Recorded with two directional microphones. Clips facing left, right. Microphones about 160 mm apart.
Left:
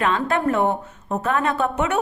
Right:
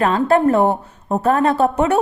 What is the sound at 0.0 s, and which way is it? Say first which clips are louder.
A woman's voice: right 6 dB; 35° right (ahead or behind).